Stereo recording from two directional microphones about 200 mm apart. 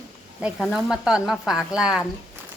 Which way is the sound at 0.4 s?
Centre (ahead or behind).